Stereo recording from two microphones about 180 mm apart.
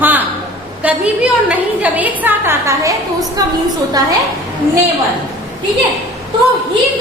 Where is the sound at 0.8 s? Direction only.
5° right (ahead or behind).